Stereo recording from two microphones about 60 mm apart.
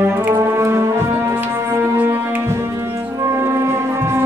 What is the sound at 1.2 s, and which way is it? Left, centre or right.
Music, right.